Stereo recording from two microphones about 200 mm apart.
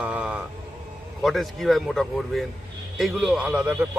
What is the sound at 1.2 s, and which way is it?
A man's voice, centre (ahead or behind).